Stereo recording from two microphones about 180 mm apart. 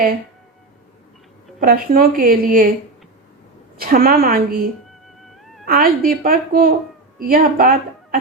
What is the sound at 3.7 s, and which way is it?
A woman's voice, 55° right (ahead or behind).